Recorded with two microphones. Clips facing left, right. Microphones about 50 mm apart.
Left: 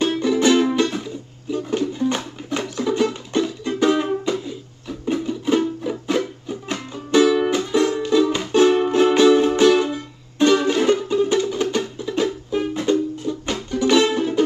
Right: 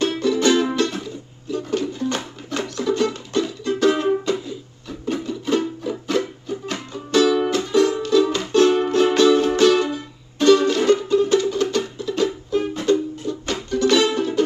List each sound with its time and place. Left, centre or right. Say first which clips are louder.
0.0 s music: left 1 dB; centre